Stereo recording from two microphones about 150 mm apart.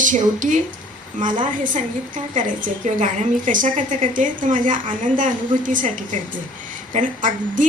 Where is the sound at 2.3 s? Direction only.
60° right (ahead or behind).